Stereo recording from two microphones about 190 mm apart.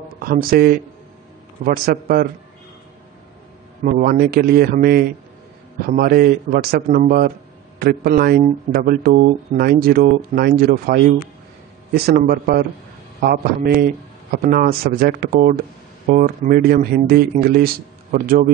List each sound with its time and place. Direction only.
0.1 s speech: 50° right (ahead or behind)
3.8 s speech: 50° right (ahead or behind)